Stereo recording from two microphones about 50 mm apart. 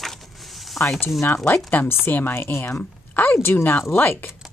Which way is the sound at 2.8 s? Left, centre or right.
Left.